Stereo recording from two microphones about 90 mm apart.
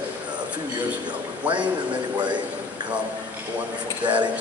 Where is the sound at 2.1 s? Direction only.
55° right (ahead or behind).